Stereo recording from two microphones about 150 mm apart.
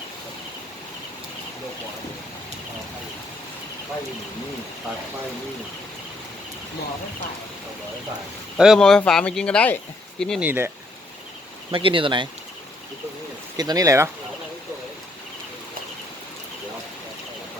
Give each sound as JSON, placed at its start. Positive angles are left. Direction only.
{"t": 8.5, "sound": "speech", "side_deg": -5}
{"t": 10.4, "sound": "speech", "side_deg": -15}
{"t": 11.7, "sound": "speech", "side_deg": -35}
{"t": 13.6, "sound": "speech", "side_deg": -25}